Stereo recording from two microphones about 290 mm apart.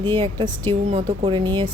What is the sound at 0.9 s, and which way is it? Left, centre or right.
Speech, centre.